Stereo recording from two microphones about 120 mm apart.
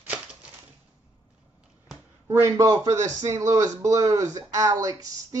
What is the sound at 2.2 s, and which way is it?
Speech, 20° right (ahead or behind).